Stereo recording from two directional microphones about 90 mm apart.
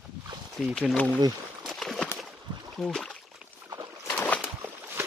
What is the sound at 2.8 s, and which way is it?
Speech, 10° left (ahead or behind).